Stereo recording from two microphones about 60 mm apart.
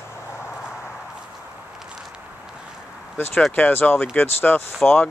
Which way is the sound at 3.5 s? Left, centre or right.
Left.